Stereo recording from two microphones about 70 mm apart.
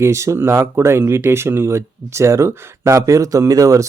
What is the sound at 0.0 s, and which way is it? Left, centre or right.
Speech, right.